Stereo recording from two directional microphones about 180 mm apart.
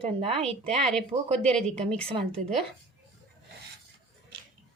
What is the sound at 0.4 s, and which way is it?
Speech, 35° right (ahead or behind).